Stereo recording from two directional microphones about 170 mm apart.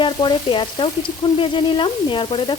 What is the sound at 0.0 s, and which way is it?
Frying, 30° left (ahead or behind).